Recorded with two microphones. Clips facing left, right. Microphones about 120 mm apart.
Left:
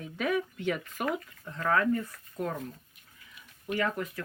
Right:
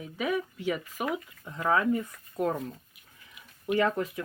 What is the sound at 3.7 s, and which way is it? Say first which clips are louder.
Speech: right 4 dB; 25° right (ahead or behind).